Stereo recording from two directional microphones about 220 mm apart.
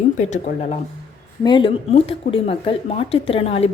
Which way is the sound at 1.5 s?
20° left (ahead or behind).